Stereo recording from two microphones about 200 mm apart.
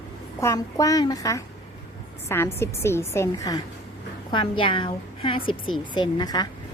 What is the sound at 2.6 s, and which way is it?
A woman's voice, 15° left (ahead or behind).